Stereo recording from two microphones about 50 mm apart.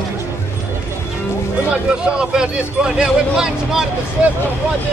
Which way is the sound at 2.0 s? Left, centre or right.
Centre.